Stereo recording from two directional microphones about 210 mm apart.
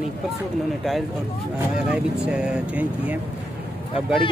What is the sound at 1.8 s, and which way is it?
Speech, 5° right (ahead or behind).